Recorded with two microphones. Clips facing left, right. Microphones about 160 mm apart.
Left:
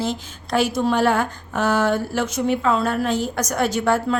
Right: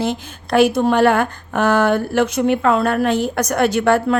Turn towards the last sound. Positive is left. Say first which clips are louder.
# right 4 dB
turn(degrees=-65)  # may be behind; listen again after turning